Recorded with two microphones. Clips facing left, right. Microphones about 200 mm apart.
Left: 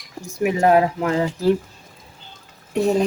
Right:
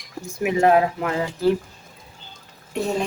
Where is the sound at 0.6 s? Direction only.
40° left (ahead or behind).